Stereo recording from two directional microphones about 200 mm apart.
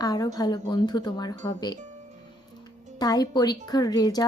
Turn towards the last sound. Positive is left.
turn(degrees=20)  # may be behind; listen again after turning